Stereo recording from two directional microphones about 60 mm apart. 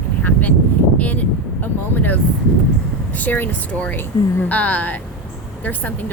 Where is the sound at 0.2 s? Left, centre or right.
Left.